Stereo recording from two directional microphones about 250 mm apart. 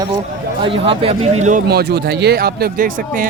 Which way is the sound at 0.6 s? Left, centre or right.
Right.